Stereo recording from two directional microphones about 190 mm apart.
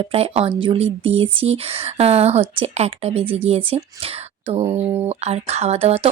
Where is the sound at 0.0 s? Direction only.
30° right (ahead or behind).